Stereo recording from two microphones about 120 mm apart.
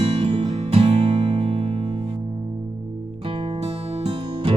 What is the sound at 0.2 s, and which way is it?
Music, 50° right (ahead or behind).